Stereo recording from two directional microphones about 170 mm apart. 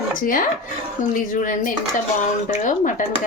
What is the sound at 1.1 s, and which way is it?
Speech, 50° left (ahead or behind).